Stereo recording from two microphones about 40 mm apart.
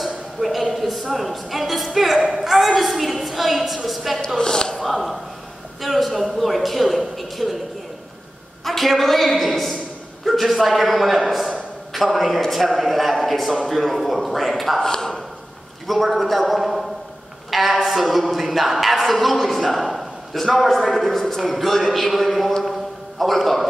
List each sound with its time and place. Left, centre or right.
0.0 s a sound: centre
1.1 s speech: centre
4.4 s speech: centre
4.7 s speech: centre
8.6 s a woman's voice: centre
10.2 s a sound: centre
10.6 s speech: centre
14.8 s a man's voice: centre
15.9 s speech: centre
17.5 s a sound: centre
17.8 s speech: centre